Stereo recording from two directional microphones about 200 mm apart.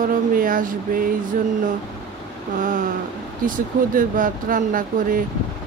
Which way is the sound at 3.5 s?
40° right (ahead or behind).